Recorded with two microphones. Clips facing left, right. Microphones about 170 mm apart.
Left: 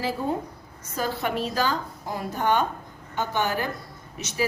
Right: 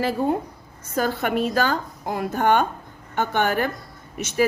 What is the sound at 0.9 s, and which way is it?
A woman's voice, 55° right (ahead or behind).